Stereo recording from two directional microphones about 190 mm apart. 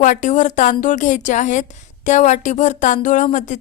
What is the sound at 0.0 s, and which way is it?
A woman's voice, 40° left (ahead or behind).